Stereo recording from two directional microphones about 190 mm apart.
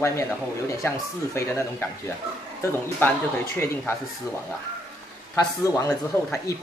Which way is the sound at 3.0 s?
10° left (ahead or behind).